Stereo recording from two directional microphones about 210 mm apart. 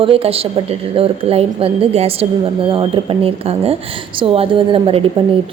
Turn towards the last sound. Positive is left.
turn(degrees=-25)  # may be behind; listen again after turning